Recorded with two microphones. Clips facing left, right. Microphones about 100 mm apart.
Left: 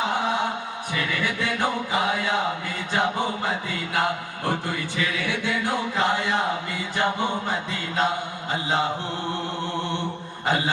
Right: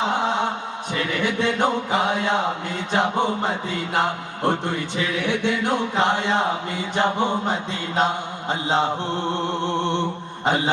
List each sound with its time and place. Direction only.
0.0 s chant: 25° right (ahead or behind)
0.9 s music: 20° right (ahead or behind)